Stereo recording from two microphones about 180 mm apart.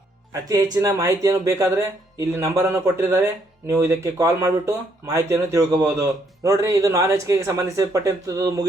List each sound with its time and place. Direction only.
0.4 s speech: 20° right (ahead or behind)